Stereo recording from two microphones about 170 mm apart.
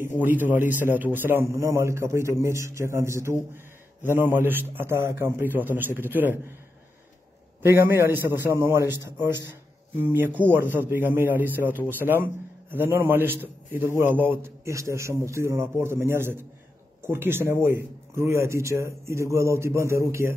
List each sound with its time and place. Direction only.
0.5 s speech: 10° right (ahead or behind)
7.6 s speech: 10° right (ahead or behind)